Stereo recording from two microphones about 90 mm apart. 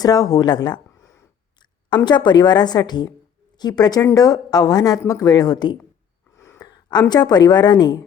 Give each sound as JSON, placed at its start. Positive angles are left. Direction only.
{"t": 0.0, "sound": "a woman's voice", "side_deg": 45}
{"t": 0.9, "sound": "a sound", "side_deg": 30}
{"t": 2.0, "sound": "a woman's voice", "side_deg": 55}
{"t": 6.3, "sound": "gasp", "side_deg": 30}
{"t": 6.6, "sound": "a sound", "side_deg": 50}
{"t": 7.1, "sound": "a woman's voice", "side_deg": 50}